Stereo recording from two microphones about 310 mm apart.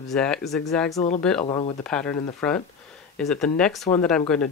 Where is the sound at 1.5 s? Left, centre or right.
Centre.